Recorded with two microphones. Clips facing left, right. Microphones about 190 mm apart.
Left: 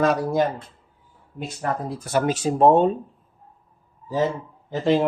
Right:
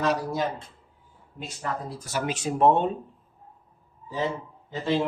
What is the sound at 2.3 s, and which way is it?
Speech, 35° left (ahead or behind).